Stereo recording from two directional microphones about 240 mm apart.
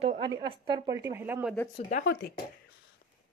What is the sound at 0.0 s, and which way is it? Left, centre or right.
A woman's voice, right.